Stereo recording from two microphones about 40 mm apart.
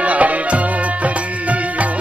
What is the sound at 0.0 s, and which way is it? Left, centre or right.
Music, right.